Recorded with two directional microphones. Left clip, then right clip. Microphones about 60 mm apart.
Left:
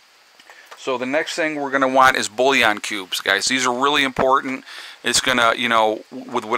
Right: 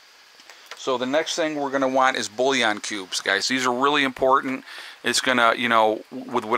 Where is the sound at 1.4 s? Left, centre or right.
Left.